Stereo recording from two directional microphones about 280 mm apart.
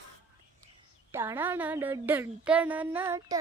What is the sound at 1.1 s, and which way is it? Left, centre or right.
A woman's voice, centre.